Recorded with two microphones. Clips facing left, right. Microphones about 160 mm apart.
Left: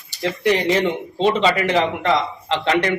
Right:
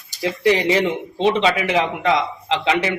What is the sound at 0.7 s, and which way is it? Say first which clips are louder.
Speech: even; centre (ahead or behind).